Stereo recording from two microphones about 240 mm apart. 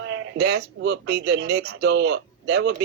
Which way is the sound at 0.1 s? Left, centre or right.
Right.